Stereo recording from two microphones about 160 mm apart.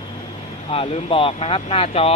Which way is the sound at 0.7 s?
40° left (ahead or behind).